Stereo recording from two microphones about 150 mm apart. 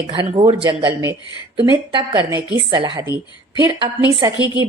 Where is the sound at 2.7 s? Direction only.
35° right (ahead or behind).